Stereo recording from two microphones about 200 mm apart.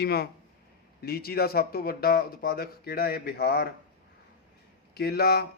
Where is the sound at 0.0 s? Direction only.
55° left (ahead or behind).